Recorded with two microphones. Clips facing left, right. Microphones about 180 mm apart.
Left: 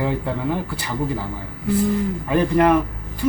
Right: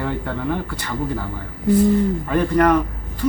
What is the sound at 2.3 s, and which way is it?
Speech, 10° left (ahead or behind).